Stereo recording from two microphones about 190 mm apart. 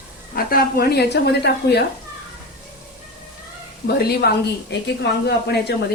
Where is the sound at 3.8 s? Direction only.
55° left (ahead or behind).